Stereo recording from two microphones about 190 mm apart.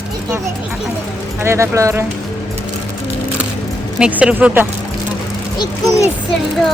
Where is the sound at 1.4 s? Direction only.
15° right (ahead or behind).